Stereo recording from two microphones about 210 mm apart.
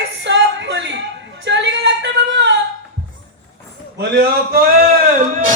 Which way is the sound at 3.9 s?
50° right (ahead or behind).